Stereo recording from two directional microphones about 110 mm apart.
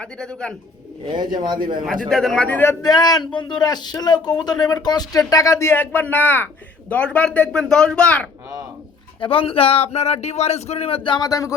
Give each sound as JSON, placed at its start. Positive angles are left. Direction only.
{"t": 0.0, "sound": "speech", "side_deg": 10}
{"t": 1.0, "sound": "a man's voice", "side_deg": -40}
{"t": 1.9, "sound": "a man's voice", "side_deg": 5}
{"t": 2.8, "sound": "speech", "side_deg": 35}
{"t": 9.2, "sound": "speech", "side_deg": 55}
{"t": 11.3, "sound": "speech", "side_deg": 30}